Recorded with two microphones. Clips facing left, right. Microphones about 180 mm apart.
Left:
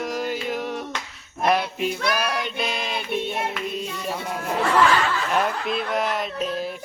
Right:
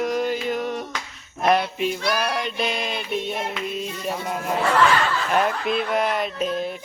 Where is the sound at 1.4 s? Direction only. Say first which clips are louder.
Right 2 dB; centre (ahead or behind).